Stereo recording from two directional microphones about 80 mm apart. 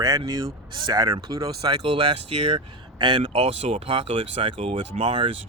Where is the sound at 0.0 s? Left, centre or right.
Right.